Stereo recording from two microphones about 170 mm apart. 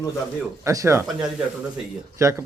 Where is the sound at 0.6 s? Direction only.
15° right (ahead or behind).